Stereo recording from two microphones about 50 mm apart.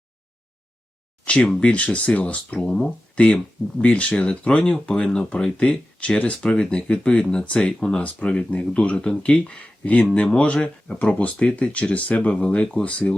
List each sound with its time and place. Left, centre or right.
1.2 s speech: left